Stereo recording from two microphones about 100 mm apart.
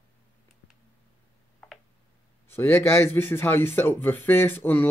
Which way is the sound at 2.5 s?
20° left (ahead or behind).